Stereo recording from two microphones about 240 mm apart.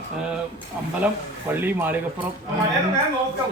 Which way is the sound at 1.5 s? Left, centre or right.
Centre.